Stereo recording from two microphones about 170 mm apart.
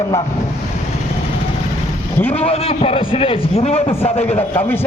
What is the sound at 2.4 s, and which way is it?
A man's voice, 35° left (ahead or behind).